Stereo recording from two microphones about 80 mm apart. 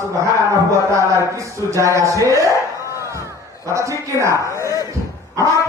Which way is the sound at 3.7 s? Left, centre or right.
Right.